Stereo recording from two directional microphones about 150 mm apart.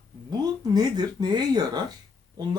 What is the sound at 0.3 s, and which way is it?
Speech, 25° right (ahead or behind).